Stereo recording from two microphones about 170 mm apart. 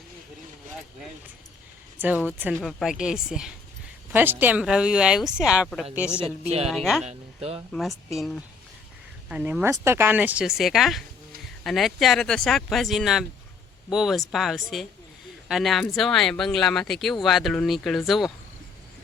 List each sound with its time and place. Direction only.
2.0 s speech: 10° right (ahead or behind)
7.0 s speech: 40° right (ahead or behind)
7.7 s speech: centre (ahead or behind)